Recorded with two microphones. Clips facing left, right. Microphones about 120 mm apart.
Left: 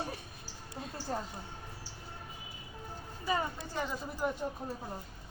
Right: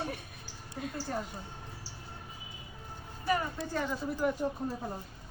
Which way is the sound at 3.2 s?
20° left (ahead or behind).